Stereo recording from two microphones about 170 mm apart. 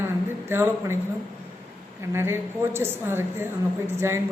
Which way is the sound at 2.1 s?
15° right (ahead or behind).